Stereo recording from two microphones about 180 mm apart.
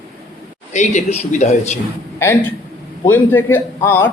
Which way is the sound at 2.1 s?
15° left (ahead or behind).